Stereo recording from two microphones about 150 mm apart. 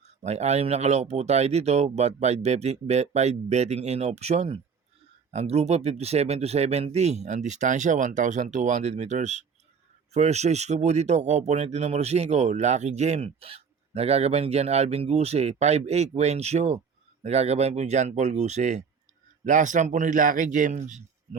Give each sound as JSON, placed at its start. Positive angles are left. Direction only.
{"t": 0.2, "sound": "a man's voice", "side_deg": -45}